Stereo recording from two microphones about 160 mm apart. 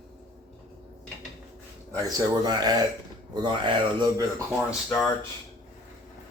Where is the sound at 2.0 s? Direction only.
25° right (ahead or behind).